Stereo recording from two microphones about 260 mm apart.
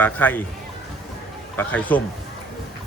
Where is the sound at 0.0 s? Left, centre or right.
Centre.